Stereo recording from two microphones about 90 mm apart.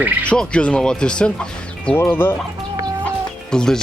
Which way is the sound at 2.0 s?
25° left (ahead or behind).